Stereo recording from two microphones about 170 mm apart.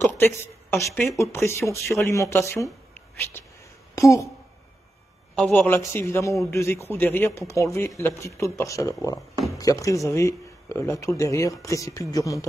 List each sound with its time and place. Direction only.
0.0 s a woman's voice: 15° left (ahead or behind)
3.9 s a woman's voice: 20° left (ahead or behind)
5.3 s a man's voice: 5° left (ahead or behind)